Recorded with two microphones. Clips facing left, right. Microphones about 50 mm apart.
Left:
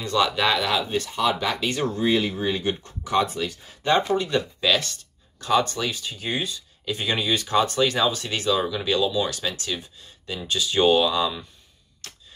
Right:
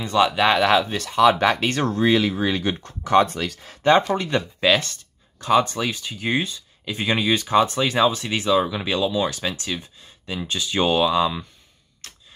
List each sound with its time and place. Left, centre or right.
0.0 s speech: centre
0.8 s speech: right
1.5 s speech: right
1.9 s speech: right
3.1 s speech: right
3.8 s speech: right
4.4 s speech: right